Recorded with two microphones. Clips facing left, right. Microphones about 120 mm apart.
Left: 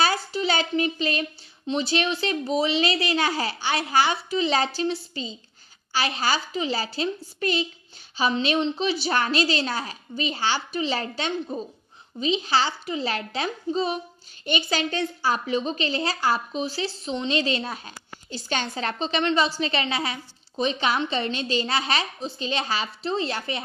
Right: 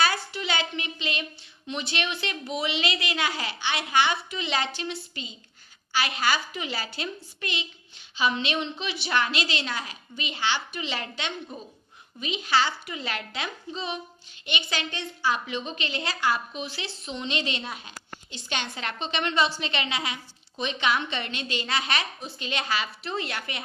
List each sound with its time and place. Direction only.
0.3 s a child's voice: 35° left (ahead or behind)